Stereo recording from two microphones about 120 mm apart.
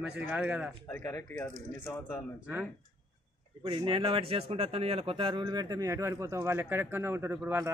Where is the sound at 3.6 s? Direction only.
45° right (ahead or behind).